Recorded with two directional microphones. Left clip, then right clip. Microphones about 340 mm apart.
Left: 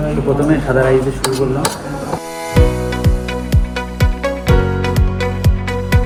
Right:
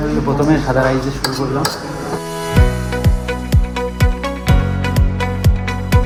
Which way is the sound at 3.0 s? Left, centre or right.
Centre.